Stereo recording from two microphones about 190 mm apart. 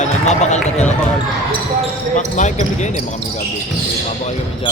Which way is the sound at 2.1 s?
40° left (ahead or behind).